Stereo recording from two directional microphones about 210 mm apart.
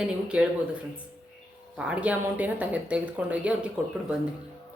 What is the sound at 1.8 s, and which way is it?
A woman's voice, 5° right (ahead or behind).